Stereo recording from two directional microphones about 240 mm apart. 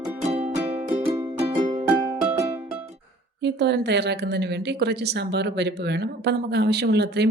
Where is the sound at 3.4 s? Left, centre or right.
Right.